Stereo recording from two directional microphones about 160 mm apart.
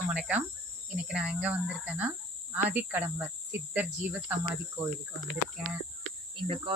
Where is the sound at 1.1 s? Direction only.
5° right (ahead or behind).